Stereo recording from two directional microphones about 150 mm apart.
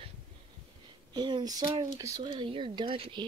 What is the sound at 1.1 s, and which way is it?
Speech, 30° right (ahead or behind).